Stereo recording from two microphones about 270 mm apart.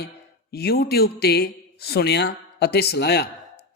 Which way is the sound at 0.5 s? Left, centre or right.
Left.